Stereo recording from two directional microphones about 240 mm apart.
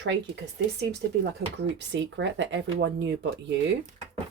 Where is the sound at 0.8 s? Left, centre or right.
Right.